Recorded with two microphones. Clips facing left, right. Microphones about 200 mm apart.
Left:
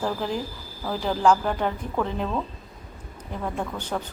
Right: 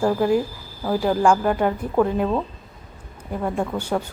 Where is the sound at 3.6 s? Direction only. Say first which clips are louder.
Right 6 dB; 10° right (ahead or behind).